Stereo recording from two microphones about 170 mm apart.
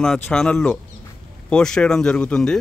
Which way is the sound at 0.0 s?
5° left (ahead or behind).